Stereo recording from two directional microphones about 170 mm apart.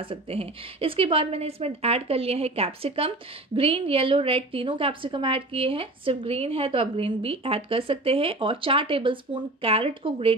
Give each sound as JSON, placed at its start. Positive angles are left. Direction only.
{"t": 0.0, "sound": "a woman's voice", "side_deg": -35}